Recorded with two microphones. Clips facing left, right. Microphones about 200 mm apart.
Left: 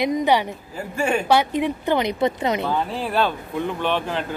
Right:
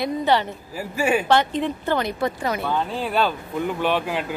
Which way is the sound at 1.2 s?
10° left (ahead or behind).